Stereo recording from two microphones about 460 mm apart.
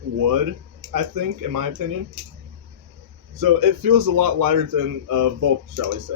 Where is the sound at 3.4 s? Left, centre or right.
Right.